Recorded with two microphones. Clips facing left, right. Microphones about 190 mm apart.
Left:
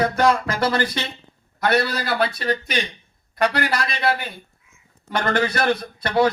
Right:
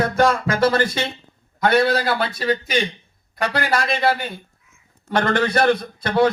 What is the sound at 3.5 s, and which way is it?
Speech, 50° right (ahead or behind).